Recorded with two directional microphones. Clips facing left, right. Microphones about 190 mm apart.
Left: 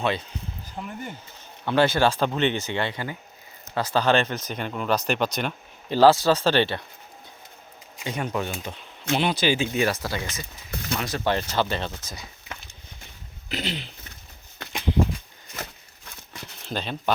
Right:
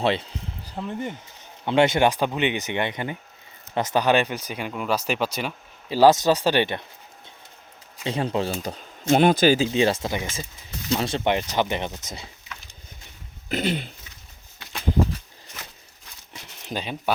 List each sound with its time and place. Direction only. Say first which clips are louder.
0.0 s speech: right 3 dB; 30° right (ahead or behind); by 6.1 s 5° right (ahead or behind)
6.1 s speech: right 1 dB; 20° right (ahead or behind)
8.0 s speech: right 3 dB; 30° right (ahead or behind)
8.6 s speech: right 6 dB; 45° right (ahead or behind)
9.7 s speech: right 3 dB; 25° right (ahead or behind)
12.0 s speech: right 2 dB; 25° right (ahead or behind)
13.5 s speech: right 6 dB; 50° right (ahead or behind)
16.6 s speech: even; 10° right (ahead or behind)